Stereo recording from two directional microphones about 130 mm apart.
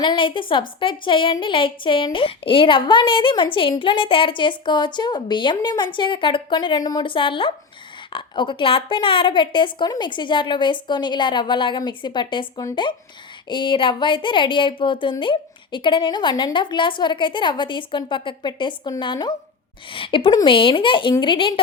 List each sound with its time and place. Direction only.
0.0 s speech: 40° left (ahead or behind)